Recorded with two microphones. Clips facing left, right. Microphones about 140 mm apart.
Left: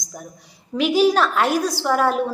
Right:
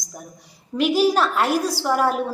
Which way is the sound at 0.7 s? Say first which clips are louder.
Left 1 dB; centre (ahead or behind).